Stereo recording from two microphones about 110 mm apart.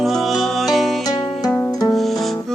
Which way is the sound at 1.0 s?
35° left (ahead or behind).